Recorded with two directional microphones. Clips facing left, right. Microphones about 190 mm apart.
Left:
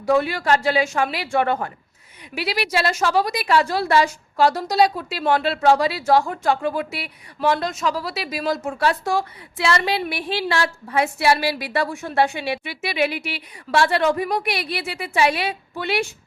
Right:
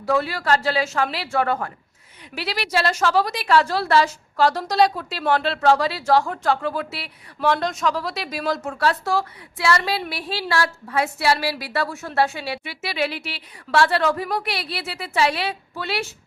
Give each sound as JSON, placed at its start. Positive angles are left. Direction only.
{"t": 0.0, "sound": "a woman's voice", "side_deg": 15}